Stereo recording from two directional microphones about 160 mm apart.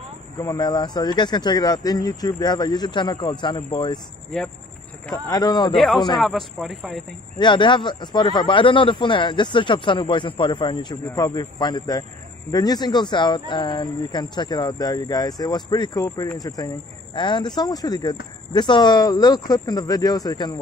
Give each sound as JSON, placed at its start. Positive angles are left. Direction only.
{"t": 0.4, "sound": "speech", "side_deg": 25}
{"t": 5.1, "sound": "speech", "side_deg": 25}
{"t": 5.8, "sound": "a man's voice", "side_deg": 0}
{"t": 7.3, "sound": "speech", "side_deg": 30}